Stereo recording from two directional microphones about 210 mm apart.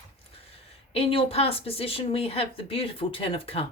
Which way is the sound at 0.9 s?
25° left (ahead or behind).